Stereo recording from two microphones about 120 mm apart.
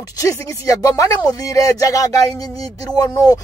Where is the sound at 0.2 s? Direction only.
30° left (ahead or behind).